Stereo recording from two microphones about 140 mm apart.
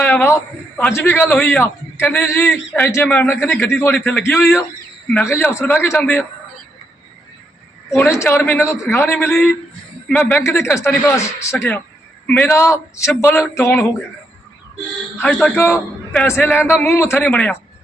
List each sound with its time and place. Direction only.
0.0 s a sound: 15° left (ahead or behind)
0.8 s a man's voice: 15° left (ahead or behind)
7.9 s a man's voice: 20° left (ahead or behind)
11.5 s a man's voice: 5° left (ahead or behind)
15.2 s a man's voice: 10° left (ahead or behind)